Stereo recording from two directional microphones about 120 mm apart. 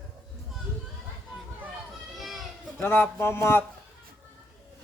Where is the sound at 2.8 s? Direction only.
20° left (ahead or behind).